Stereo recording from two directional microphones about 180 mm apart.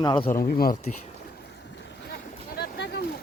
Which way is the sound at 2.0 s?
60° left (ahead or behind).